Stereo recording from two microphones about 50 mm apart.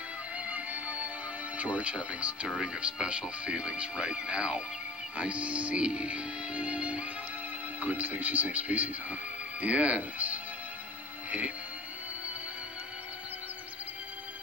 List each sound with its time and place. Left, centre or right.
0.5 s music: right
1.6 s speech: right